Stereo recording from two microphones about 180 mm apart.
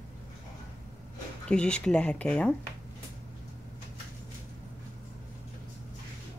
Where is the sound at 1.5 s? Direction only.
5° left (ahead or behind).